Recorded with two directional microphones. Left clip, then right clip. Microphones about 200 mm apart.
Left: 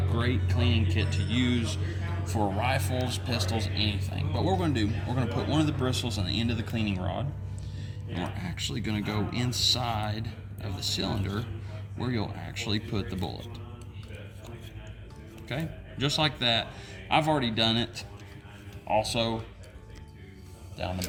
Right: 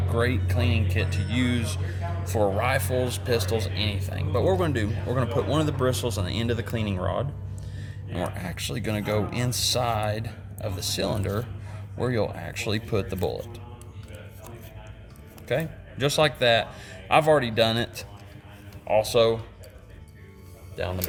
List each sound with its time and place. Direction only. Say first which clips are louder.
0.1 s speech: right 7 dB; 50° right (ahead or behind)
15.4 s speech: right 9 dB; 55° right (ahead or behind)